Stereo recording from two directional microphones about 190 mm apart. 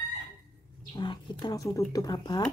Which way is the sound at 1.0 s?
25° left (ahead or behind).